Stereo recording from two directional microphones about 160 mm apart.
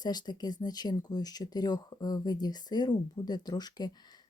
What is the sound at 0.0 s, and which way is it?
Speech, 25° left (ahead or behind).